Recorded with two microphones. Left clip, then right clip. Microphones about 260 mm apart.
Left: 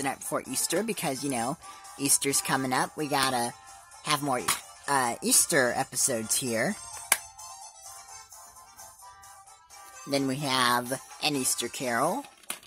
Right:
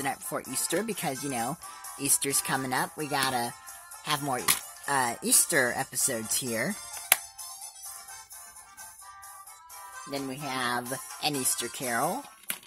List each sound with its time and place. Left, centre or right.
0.0 s speech: centre
10.0 s speech: left